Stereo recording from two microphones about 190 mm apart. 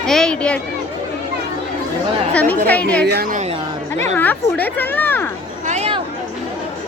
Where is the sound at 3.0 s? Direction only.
55° right (ahead or behind).